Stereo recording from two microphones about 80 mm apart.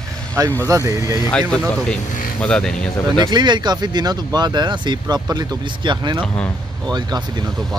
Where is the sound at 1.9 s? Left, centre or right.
Centre.